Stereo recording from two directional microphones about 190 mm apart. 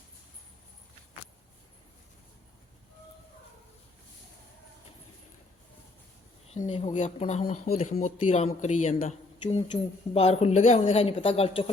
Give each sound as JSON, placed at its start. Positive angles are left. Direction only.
{"t": 6.5, "sound": "speech", "side_deg": 35}